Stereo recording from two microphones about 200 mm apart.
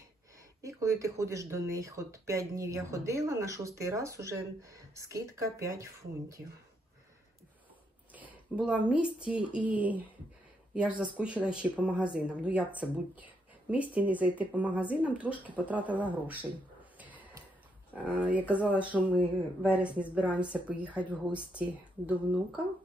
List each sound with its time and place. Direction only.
0.6 s speech: 15° right (ahead or behind)
8.1 s a woman's voice: 10° right (ahead or behind)
17.0 s a sound: 10° right (ahead or behind)
17.9 s speech: 5° right (ahead or behind)